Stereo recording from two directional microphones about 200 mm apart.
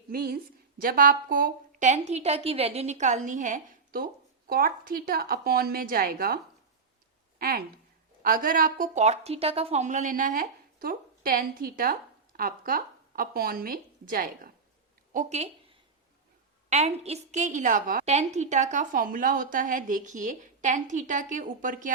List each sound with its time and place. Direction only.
0.1 s a woman's voice: 50° right (ahead or behind)